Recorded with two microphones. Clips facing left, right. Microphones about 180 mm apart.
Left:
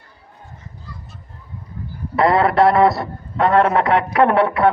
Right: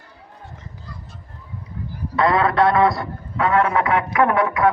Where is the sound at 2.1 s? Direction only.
25° left (ahead or behind).